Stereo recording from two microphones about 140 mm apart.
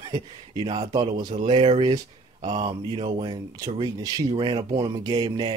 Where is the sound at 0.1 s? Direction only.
30° right (ahead or behind).